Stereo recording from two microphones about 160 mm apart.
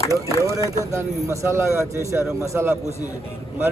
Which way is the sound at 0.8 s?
20° right (ahead or behind).